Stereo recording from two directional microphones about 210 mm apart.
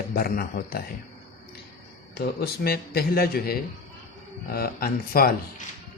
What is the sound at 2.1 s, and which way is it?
Speech, 50° left (ahead or behind).